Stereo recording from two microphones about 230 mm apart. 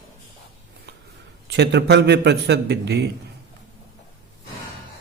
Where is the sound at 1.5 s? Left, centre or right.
Right.